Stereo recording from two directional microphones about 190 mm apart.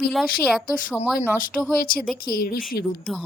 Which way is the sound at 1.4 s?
45° left (ahead or behind).